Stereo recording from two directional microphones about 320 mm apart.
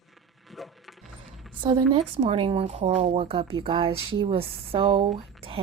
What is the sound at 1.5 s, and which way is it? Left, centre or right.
A woman's voice, centre.